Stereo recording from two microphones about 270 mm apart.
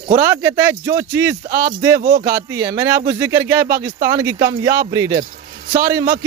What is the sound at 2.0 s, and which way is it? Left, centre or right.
Speech, right.